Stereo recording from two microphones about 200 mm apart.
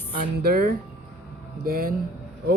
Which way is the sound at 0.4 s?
50° right (ahead or behind).